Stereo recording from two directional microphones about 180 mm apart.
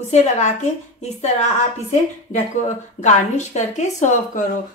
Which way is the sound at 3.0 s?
40° left (ahead or behind).